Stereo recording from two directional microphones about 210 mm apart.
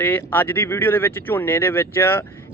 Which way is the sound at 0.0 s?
10° left (ahead or behind).